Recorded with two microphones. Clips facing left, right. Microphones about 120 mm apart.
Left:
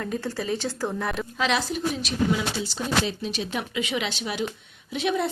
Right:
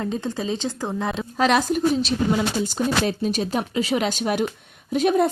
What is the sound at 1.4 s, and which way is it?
A woman's voice, 45° right (ahead or behind).